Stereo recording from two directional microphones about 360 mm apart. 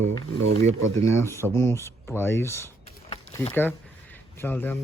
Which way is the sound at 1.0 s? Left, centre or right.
Centre.